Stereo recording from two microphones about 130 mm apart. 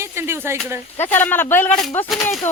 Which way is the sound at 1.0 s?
15° left (ahead or behind).